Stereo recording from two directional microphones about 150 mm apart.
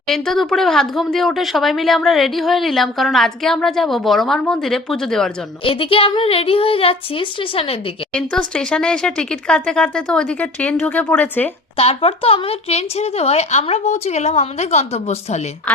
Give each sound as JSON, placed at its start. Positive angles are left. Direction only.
{"t": 0.1, "sound": "speech", "side_deg": 0}
{"t": 5.6, "sound": "a woman's voice", "side_deg": 35}
{"t": 8.1, "sound": "speech", "side_deg": 5}
{"t": 11.8, "sound": "speech", "side_deg": 40}